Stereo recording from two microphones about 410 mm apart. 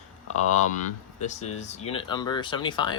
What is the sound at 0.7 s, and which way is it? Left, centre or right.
Speech, centre.